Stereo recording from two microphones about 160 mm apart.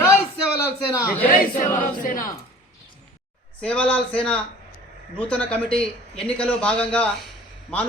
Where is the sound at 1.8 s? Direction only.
55° left (ahead or behind).